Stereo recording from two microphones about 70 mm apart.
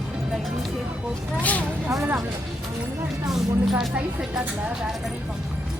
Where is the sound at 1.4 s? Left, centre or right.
Left.